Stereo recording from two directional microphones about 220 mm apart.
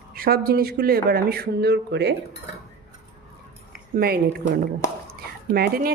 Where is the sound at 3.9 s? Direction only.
45° right (ahead or behind).